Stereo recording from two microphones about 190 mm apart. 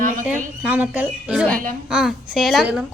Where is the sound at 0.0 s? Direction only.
45° right (ahead or behind).